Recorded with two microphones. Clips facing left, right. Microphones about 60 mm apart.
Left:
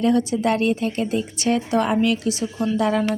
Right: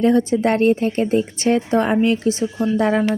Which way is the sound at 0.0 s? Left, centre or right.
Right.